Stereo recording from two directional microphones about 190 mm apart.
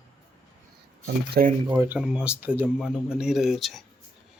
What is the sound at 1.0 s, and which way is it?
Speech, 55° right (ahead or behind).